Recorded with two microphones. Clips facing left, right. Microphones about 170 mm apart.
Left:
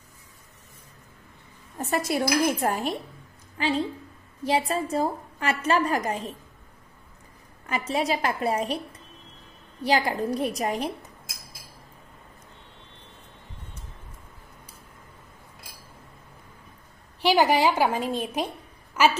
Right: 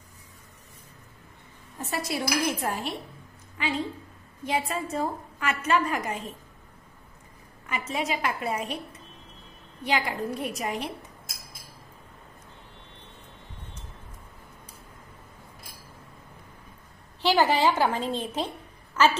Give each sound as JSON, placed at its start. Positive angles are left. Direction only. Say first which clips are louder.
{"t": 1.8, "sound": "speech", "louder": "left 5 dB", "side_deg": 50}
{"t": 3.5, "sound": "a woman's voice", "louder": "left 4 dB", "side_deg": 35}
{"t": 7.6, "sound": "a woman's voice", "louder": "left 4 dB", "side_deg": 35}
{"t": 9.8, "sound": "a woman's voice", "louder": "left 4 dB", "side_deg": 35}
{"t": 17.2, "sound": "a woman's voice", "louder": "left 2 dB", "side_deg": 15}